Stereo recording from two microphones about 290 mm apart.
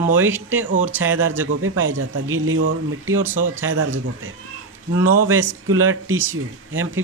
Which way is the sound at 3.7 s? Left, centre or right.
Right.